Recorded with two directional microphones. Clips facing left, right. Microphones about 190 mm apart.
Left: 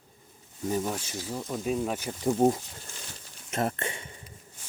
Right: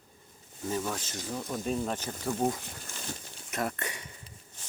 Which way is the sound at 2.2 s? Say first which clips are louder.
Left 7 dB; 25° left (ahead or behind).